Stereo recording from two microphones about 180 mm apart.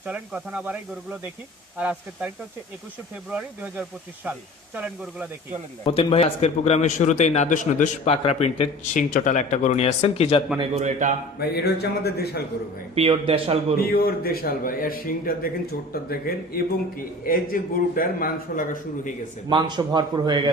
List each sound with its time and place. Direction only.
0.0 s speech: 10° right (ahead or behind)
1.8 s speech: 10° right (ahead or behind)
3.3 s speech: 10° right (ahead or behind)
5.8 s speech: 30° left (ahead or behind)
8.1 s speech: 30° left (ahead or behind)
10.6 s a man's voice: 40° right (ahead or behind)
11.3 s speech: 65° left (ahead or behind)
13.0 s a man's voice: 30° right (ahead or behind)
13.7 s a man's voice: 60° left (ahead or behind)
19.5 s a man's voice: 25° right (ahead or behind)